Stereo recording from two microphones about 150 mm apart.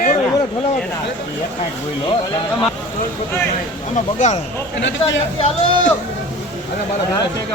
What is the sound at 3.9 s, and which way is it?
Speech, 50° left (ahead or behind).